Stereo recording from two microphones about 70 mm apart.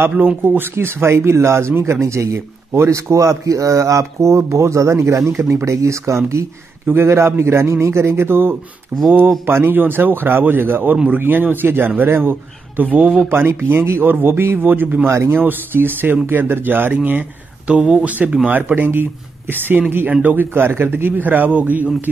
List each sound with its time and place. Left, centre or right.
0.1 s speech: right
0.5 s speech: right
13.3 s speech: right
15.0 s speech: right
15.3 s speech: right